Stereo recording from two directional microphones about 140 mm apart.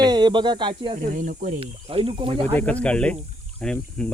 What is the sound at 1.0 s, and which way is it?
Speech, 70° right (ahead or behind).